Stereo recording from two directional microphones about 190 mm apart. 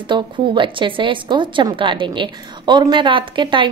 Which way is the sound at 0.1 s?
25° right (ahead or behind).